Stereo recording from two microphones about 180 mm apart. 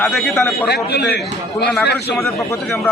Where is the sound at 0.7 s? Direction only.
65° left (ahead or behind).